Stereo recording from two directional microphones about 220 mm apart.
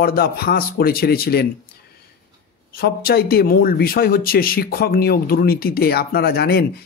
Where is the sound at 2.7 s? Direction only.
45° left (ahead or behind).